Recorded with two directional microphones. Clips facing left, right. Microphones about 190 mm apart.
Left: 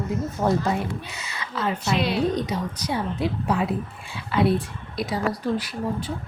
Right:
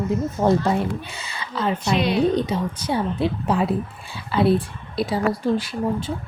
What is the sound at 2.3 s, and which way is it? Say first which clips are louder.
Speech: right 4 dB; 30° right (ahead or behind).